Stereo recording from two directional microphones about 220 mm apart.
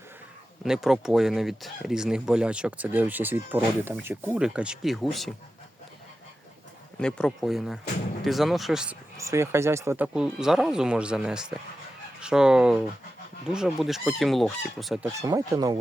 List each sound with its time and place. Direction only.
0.6 s speech: centre (ahead or behind)
7.0 s speech: 5° left (ahead or behind)
9.1 s speech: 15° right (ahead or behind)
15.2 s speech: 15° right (ahead or behind)